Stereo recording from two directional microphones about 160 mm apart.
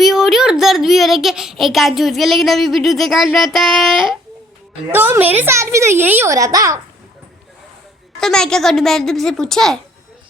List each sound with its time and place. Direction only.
0.0 s a child's voice: centre (ahead or behind)
4.9 s a child's voice: 15° right (ahead or behind)
8.2 s a child's voice: 5° left (ahead or behind)